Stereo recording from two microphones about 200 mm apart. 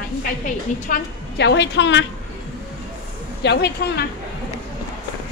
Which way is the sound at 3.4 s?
55° left (ahead or behind).